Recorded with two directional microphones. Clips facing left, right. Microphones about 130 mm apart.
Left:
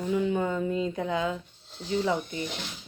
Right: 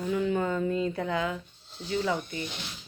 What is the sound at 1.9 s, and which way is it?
Speech, 20° left (ahead or behind).